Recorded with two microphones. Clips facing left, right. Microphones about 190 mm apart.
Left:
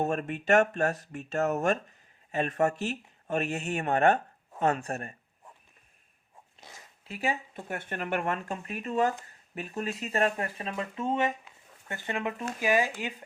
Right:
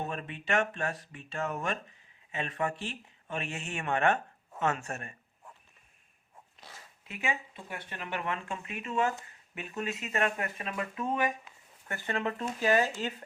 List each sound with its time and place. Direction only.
0.0 s speech: 45° left (ahead or behind)
7.0 s speech: 35° left (ahead or behind); by 13.2 s 15° left (ahead or behind)